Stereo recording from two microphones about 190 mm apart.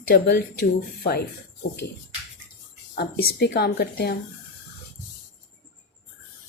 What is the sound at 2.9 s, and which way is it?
A woman's voice, 55° left (ahead or behind).